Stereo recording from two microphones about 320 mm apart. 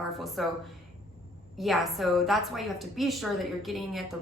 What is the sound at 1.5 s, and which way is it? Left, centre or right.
A woman's voice, centre.